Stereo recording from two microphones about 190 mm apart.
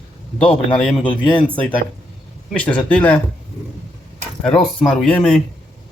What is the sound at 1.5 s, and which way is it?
Speech, 5° left (ahead or behind).